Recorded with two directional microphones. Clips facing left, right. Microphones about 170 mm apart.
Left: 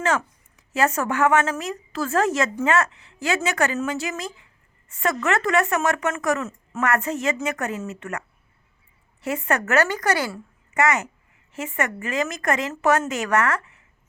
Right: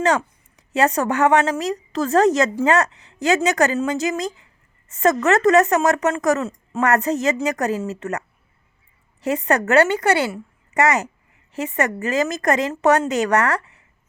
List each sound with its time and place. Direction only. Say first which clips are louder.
0.0 s speech: right 4 dB; 35° right (ahead or behind)
9.2 s a woman's voice: right 5 dB; 35° right (ahead or behind)
10.8 s speech: right 3 dB; 35° right (ahead or behind)